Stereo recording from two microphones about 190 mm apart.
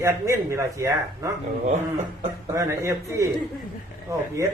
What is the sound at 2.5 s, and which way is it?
Speech, 15° right (ahead or behind).